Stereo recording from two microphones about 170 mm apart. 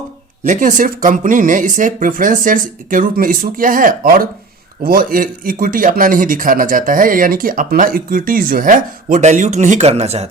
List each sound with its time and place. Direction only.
0.4 s speech: 50° right (ahead or behind)